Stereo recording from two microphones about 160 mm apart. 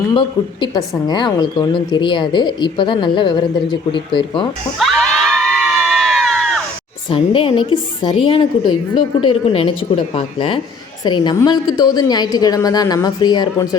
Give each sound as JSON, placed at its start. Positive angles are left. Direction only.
{"t": 0.1, "sound": "a woman's voice", "side_deg": 30}
{"t": 4.8, "sound": "crowd", "side_deg": 5}
{"t": 7.1, "sound": "a woman's voice", "side_deg": 35}